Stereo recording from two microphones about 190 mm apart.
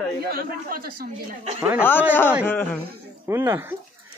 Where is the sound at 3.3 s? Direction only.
15° right (ahead or behind).